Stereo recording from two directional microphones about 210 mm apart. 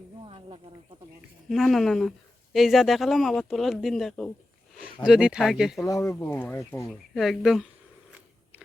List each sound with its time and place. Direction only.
0.3 s a sound: 25° right (ahead or behind)
1.5 s a woman's voice: centre (ahead or behind)
5.8 s speech: 15° left (ahead or behind)